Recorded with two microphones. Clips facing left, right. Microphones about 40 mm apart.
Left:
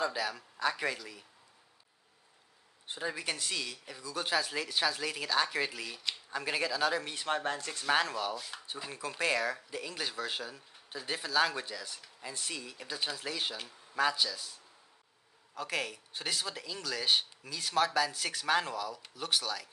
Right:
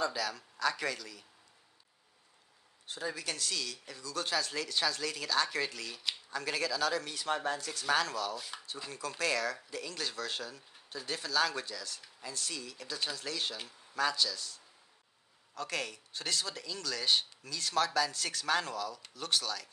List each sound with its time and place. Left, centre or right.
0.0 s speech: centre
2.9 s speech: left
7.2 s speech: left
15.5 s speech: centre